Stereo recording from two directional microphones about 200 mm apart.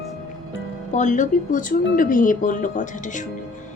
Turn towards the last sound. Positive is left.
turn(degrees=40)  # may be behind; listen again after turning